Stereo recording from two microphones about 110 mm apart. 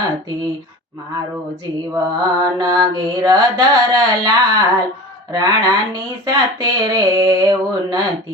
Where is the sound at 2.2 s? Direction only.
40° right (ahead or behind).